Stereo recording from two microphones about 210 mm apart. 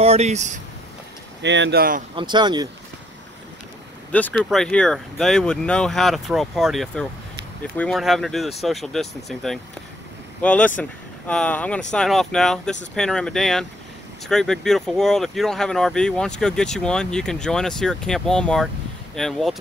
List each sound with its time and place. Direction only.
0.0 s speech: 30° right (ahead or behind)
1.4 s speech: 60° right (ahead or behind)
2.1 s speech: 20° right (ahead or behind)
4.1 s speech: 5° left (ahead or behind)